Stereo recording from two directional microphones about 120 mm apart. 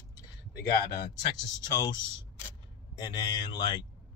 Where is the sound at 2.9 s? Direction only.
35° left (ahead or behind).